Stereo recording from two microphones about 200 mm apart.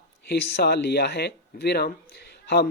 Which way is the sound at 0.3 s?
55° left (ahead or behind).